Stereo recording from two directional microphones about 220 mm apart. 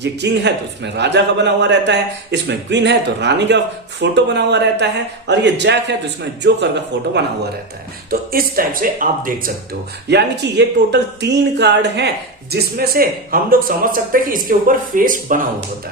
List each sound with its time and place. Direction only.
0.0 s a man's voice: 50° right (ahead or behind)
8.1 s speech: 40° right (ahead or behind)
10.1 s a man's voice: 50° right (ahead or behind)